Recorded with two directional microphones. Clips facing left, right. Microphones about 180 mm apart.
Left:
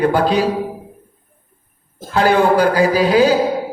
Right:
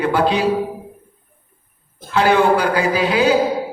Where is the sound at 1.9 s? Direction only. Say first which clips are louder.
Left 1 dB; 40° left (ahead or behind).